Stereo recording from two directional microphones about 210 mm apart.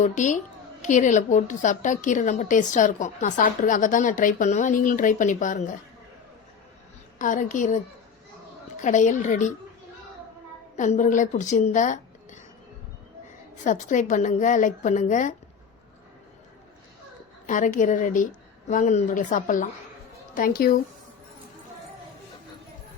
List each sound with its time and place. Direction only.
0.0 s a woman's voice: 35° left (ahead or behind)
7.2 s a woman's voice: 35° left (ahead or behind)
8.8 s a woman's voice: 35° left (ahead or behind)
10.8 s speech: 35° left (ahead or behind)
13.7 s a woman's voice: 35° left (ahead or behind)
17.4 s a woman's voice: 40° left (ahead or behind)
20.6 s speech: 45° left (ahead or behind)